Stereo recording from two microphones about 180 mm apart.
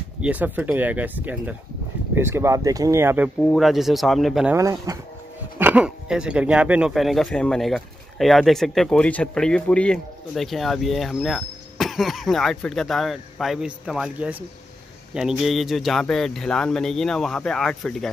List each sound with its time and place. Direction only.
0.2 s speech: 10° right (ahead or behind)
3.3 s speech: centre (ahead or behind)
4.6 s speech: 15° right (ahead or behind); by 18.1 s centre (ahead or behind)